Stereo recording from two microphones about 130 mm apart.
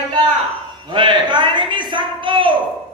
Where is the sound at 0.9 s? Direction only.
35° right (ahead or behind).